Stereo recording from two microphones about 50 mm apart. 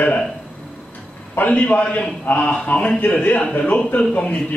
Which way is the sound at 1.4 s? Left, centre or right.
Left.